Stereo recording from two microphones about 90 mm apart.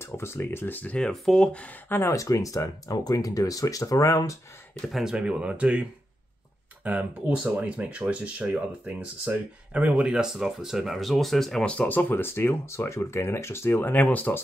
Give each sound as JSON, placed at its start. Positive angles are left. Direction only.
{"t": 0.0, "sound": "speech", "side_deg": 30}
{"t": 2.0, "sound": "speech", "side_deg": 35}
{"t": 4.8, "sound": "speech", "side_deg": -5}